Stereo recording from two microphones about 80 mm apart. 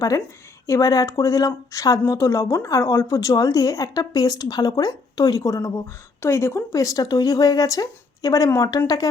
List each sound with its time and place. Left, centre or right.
0.7 s a woman's voice: left